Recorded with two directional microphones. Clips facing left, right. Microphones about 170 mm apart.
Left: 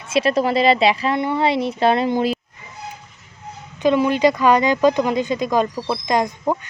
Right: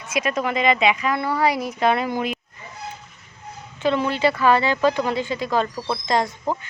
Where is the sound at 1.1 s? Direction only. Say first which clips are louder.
Left 2 dB; 25° left (ahead or behind).